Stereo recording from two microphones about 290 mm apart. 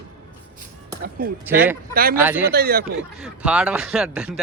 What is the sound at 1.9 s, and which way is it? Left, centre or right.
Speech, right.